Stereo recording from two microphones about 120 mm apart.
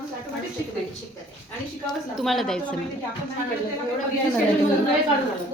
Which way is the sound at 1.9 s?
Centre (ahead or behind).